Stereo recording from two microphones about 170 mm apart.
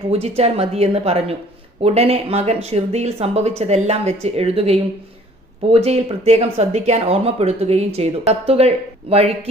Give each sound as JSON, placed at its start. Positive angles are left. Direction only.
{"t": 0.1, "sound": "speech", "side_deg": -35}